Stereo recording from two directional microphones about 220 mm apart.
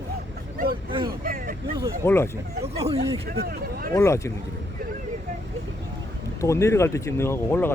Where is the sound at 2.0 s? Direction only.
10° left (ahead or behind).